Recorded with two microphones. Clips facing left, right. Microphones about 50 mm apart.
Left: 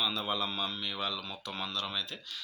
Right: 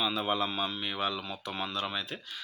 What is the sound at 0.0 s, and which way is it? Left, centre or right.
Speech, centre.